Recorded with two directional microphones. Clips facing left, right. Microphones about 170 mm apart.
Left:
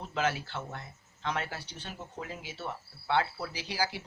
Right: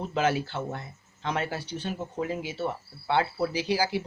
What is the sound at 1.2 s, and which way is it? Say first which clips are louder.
Speech: right 5 dB; 20° right (ahead or behind).